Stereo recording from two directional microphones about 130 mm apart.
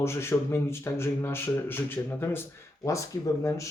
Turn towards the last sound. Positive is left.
turn(degrees=25)  # may be behind; listen again after turning